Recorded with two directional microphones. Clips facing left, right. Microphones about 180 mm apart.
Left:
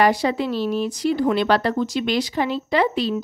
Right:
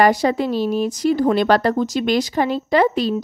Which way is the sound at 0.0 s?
45° right (ahead or behind).